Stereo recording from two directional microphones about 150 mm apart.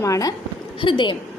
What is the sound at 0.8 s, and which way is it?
Speech, 35° left (ahead or behind).